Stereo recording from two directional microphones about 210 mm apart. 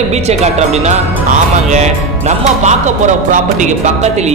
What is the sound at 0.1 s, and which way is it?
Speech, 30° right (ahead or behind).